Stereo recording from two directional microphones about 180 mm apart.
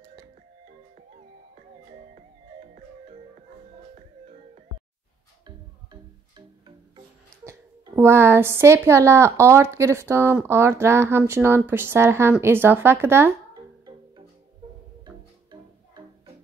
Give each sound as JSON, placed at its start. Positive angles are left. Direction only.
{"t": 1.5, "sound": "music", "side_deg": -40}
{"t": 7.9, "sound": "speech", "side_deg": -15}
{"t": 15.0, "sound": "music", "side_deg": -25}